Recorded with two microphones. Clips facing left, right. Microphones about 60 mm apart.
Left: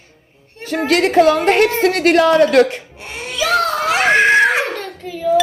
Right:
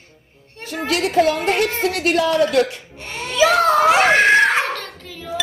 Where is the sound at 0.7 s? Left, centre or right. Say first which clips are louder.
Left 6 dB; left.